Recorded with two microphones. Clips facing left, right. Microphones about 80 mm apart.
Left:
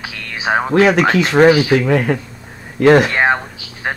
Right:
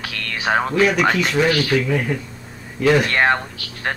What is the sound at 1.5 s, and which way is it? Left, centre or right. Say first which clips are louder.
Speech: left 6 dB; centre.